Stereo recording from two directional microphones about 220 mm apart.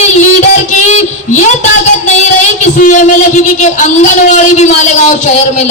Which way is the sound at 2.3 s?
35° left (ahead or behind).